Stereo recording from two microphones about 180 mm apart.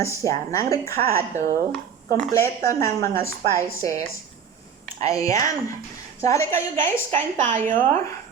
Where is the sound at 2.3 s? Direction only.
15° left (ahead or behind).